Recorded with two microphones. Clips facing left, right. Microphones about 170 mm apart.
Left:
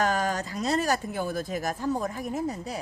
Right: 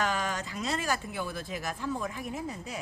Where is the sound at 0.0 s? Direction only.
40° left (ahead or behind).